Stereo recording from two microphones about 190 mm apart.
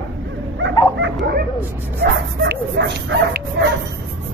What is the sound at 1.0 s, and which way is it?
Dog, 60° right (ahead or behind).